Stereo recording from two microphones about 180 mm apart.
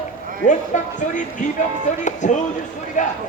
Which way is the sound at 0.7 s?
40° left (ahead or behind).